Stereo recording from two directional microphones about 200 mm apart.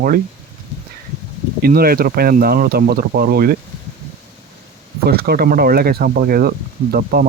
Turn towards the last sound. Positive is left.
turn(degrees=-50)  # may be behind; listen again after turning